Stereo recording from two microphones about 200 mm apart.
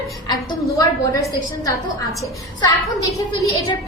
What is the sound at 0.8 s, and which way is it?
Speech, 15° left (ahead or behind).